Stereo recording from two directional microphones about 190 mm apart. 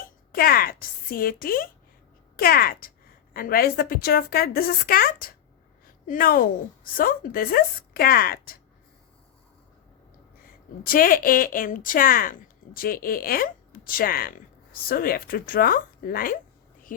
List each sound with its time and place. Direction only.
0.3 s speech: 50° left (ahead or behind)
10.8 s speech: 50° left (ahead or behind)